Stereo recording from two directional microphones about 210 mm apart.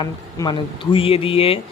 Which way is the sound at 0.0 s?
20° left (ahead or behind).